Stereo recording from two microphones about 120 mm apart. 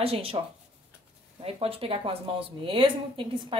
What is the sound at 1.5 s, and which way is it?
A woman's voice, 50° right (ahead or behind).